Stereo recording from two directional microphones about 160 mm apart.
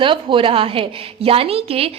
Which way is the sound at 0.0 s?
30° right (ahead or behind).